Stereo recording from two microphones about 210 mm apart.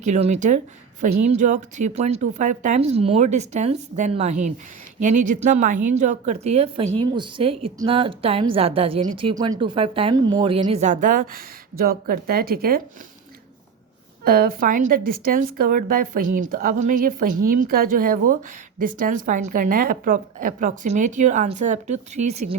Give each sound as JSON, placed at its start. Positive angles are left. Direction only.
{"t": 0.0, "sound": "a woman's voice", "side_deg": -35}
{"t": 14.3, "sound": "a woman's voice", "side_deg": -45}